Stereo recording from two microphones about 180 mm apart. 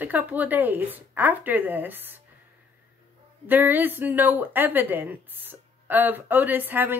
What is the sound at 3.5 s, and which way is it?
Speech, 10° right (ahead or behind).